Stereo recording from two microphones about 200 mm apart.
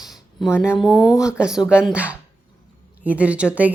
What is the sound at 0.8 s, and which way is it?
A woman's voice, centre (ahead or behind).